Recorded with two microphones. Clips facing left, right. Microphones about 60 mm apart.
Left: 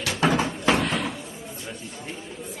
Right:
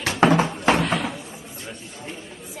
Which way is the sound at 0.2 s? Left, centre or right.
Right.